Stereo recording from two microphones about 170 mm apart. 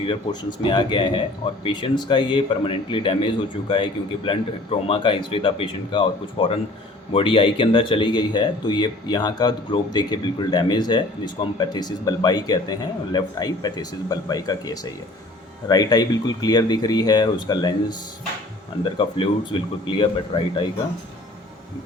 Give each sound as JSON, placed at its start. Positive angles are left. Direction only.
{"t": 0.0, "sound": "speech", "side_deg": 30}
{"t": 18.9, "sound": "speech", "side_deg": 30}